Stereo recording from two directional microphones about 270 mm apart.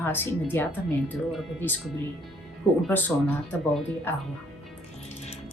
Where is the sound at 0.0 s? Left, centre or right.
Centre.